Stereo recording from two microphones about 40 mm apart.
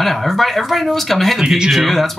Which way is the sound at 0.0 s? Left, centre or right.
Centre.